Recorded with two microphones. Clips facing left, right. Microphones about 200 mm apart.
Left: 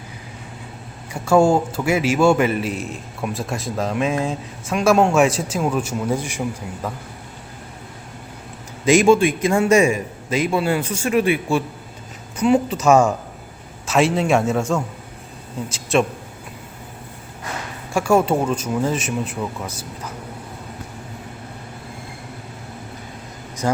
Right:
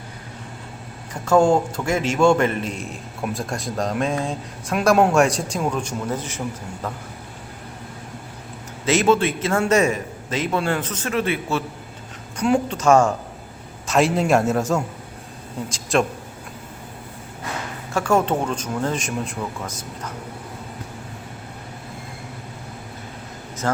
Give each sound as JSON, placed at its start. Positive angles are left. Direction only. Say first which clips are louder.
{"t": 1.1, "sound": "a man's voice", "louder": "left 1 dB", "side_deg": 10}
{"t": 8.9, "sound": "a man's voice", "louder": "left 4 dB", "side_deg": 15}
{"t": 17.9, "sound": "a man's voice", "louder": "left 3 dB", "side_deg": 10}
{"t": 23.6, "sound": "speech", "louder": "left 2 dB", "side_deg": 15}